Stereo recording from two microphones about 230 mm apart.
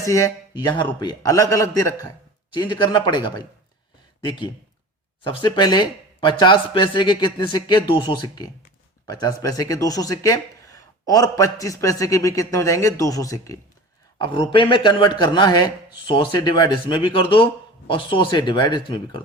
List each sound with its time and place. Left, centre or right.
0.0 s a man's voice: centre
5.2 s a man's voice: left